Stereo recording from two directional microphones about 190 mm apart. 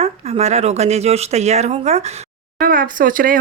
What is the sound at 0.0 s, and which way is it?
Speech, 35° right (ahead or behind).